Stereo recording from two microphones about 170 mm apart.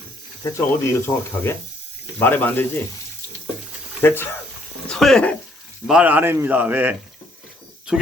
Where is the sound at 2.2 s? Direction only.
10° left (ahead or behind).